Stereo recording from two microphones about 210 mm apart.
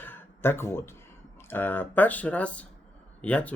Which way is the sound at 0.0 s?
10° left (ahead or behind).